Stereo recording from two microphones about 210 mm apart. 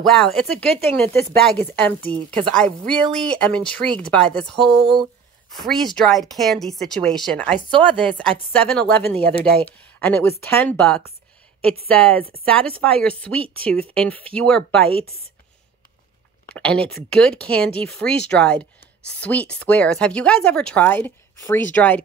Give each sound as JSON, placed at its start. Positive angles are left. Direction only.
{"t": 0.0, "sound": "speech", "side_deg": 0}
{"t": 16.4, "sound": "speech", "side_deg": 5}